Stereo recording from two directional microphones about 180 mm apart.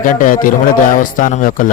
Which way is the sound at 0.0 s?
50° left (ahead or behind).